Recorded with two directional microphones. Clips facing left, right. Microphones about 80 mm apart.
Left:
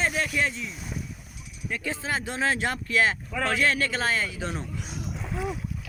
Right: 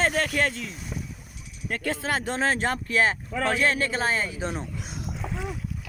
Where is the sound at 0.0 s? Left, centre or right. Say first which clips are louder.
Right 2 dB; right.